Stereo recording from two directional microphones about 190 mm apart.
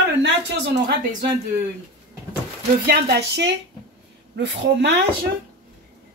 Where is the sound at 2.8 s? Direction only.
65° right (ahead or behind).